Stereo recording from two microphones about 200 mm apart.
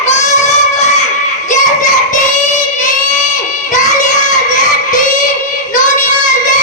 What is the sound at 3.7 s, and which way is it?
Child singing, 40° left (ahead or behind).